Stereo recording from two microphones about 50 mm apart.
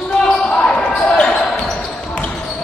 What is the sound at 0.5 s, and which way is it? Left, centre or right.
Basketball bounce, left.